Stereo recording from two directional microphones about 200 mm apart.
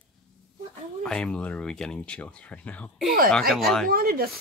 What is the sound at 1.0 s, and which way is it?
Speech, 5° left (ahead or behind).